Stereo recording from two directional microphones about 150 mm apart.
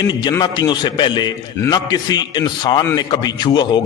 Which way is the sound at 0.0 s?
30° left (ahead or behind).